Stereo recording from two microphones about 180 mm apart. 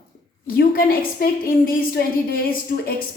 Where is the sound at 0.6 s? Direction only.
55° left (ahead or behind).